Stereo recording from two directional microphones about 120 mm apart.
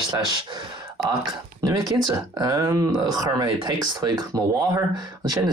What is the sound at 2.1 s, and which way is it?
Speech, 35° right (ahead or behind).